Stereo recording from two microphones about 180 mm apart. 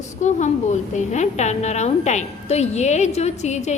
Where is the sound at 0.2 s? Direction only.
40° left (ahead or behind).